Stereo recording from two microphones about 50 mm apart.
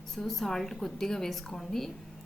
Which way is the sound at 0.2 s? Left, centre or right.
Centre.